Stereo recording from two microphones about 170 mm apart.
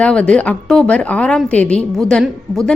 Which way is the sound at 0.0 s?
5° left (ahead or behind).